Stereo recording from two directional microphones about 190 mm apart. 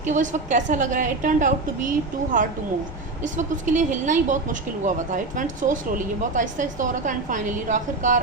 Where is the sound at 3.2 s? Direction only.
40° right (ahead or behind).